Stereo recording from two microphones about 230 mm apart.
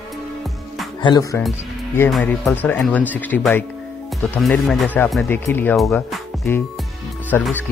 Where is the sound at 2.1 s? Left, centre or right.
Centre.